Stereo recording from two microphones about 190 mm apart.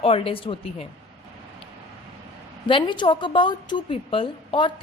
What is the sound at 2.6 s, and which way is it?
A woman's voice, 25° left (ahead or behind).